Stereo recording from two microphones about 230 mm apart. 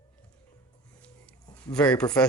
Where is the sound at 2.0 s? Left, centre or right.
Centre.